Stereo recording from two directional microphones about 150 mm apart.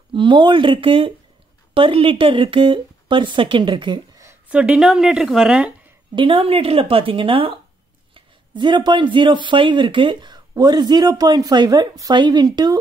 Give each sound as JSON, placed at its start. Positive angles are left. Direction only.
{"t": 0.1, "sound": "speech", "side_deg": -30}
{"t": 4.3, "sound": "speech", "side_deg": -10}
{"t": 6.1, "sound": "speech", "side_deg": -35}